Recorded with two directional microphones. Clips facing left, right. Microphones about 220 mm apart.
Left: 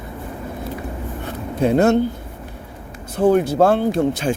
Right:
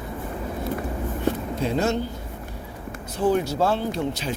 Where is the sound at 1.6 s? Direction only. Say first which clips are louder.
Left 9 dB; 60° left (ahead or behind).